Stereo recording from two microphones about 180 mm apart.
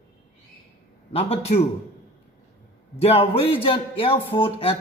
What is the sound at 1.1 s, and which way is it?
Speech, 35° left (ahead or behind).